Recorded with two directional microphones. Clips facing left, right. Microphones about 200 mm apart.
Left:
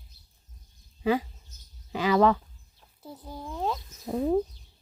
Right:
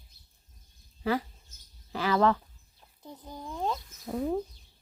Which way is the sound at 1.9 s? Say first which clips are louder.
Left 3 dB; 15° left (ahead or behind).